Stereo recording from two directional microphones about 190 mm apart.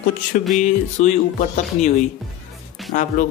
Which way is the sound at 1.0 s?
40° left (ahead or behind).